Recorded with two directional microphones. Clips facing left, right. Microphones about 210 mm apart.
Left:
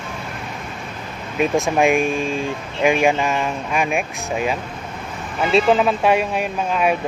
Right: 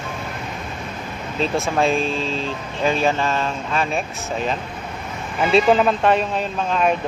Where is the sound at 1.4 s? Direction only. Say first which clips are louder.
Left 3 dB; 15° left (ahead or behind).